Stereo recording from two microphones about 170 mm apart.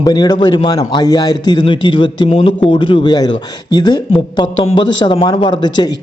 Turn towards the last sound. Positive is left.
turn(degrees=25)  # may be behind; listen again after turning